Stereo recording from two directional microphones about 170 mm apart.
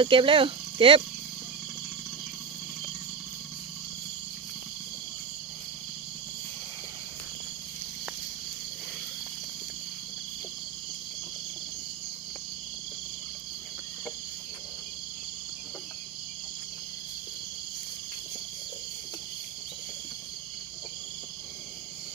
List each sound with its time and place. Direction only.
0.0 s speech: 30° right (ahead or behind)